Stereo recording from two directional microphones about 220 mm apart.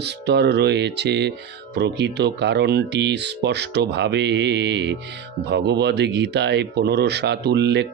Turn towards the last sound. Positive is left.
turn(degrees=-50)  # may be behind; listen again after turning